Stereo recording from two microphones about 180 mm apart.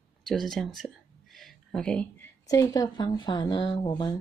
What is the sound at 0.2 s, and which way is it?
Speech, 5° left (ahead or behind).